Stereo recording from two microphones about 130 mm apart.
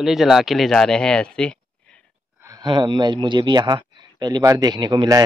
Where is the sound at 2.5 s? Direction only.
35° right (ahead or behind).